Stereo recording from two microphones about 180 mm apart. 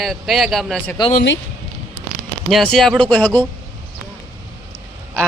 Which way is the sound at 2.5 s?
Centre (ahead or behind).